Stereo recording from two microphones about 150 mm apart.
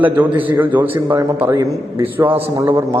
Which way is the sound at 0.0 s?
10° right (ahead or behind).